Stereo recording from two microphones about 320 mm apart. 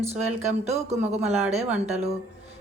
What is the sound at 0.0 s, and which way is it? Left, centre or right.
Speech, centre.